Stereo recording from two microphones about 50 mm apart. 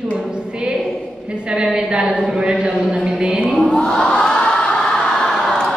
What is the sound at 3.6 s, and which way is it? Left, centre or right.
Crowd, centre.